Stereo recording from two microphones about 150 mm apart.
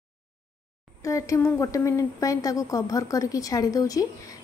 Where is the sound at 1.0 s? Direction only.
20° left (ahead or behind).